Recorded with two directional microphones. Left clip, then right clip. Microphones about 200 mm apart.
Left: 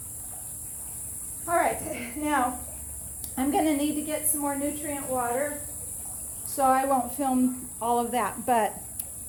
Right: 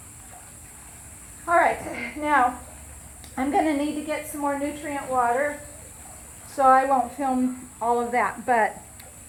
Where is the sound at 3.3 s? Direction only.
20° left (ahead or behind).